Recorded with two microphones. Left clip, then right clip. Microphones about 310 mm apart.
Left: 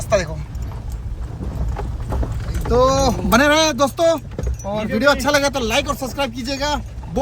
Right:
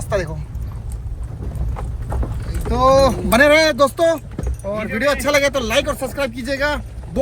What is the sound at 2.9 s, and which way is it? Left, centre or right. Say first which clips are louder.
Speech: right 10 dB; centre.